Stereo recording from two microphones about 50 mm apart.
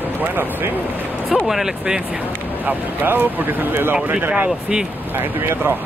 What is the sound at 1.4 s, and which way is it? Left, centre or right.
Speech, centre.